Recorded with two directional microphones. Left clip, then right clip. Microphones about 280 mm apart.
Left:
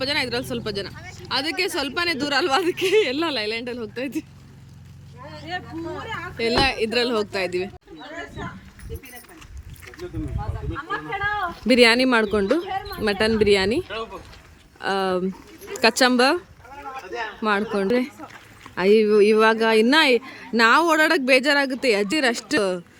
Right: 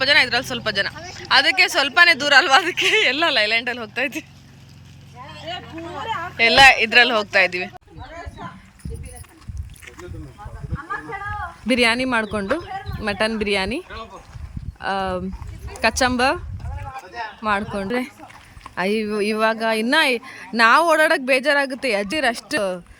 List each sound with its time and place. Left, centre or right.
0.0 s speech: centre
5.5 s speech: centre
6.3 s speech: centre
11.6 s speech: centre